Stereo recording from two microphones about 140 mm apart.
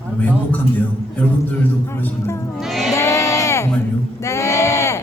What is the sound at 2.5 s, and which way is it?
Music, centre (ahead or behind).